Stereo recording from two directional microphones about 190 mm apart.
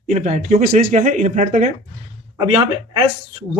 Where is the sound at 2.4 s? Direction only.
25° right (ahead or behind).